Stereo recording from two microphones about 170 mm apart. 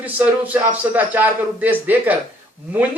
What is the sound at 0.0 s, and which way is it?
Speech, 10° right (ahead or behind).